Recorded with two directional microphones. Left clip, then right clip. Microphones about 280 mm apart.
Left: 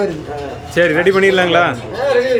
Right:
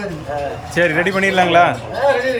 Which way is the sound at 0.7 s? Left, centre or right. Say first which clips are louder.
Left 4 dB; centre.